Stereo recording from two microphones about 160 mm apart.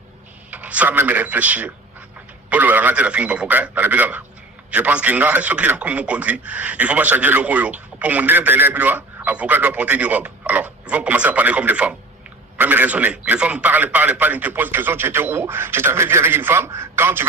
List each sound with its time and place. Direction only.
0.5 s a man's voice: 10° right (ahead or behind)